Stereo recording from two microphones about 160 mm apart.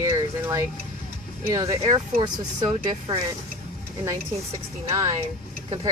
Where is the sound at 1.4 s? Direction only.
20° right (ahead or behind).